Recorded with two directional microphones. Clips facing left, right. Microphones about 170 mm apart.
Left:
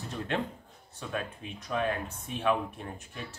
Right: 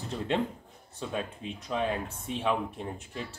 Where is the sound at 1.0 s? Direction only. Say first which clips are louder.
Right 2 dB; 25° right (ahead or behind).